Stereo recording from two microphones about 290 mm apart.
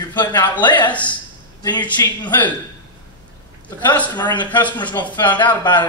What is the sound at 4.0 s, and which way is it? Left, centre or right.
Speech, centre.